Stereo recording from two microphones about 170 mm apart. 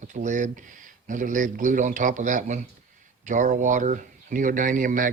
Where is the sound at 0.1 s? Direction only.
45° right (ahead or behind).